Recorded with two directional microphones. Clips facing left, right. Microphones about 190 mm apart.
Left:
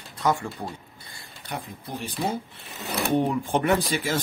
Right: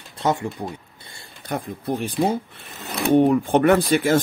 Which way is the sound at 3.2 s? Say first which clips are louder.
Right 9 dB; 60° right (ahead or behind).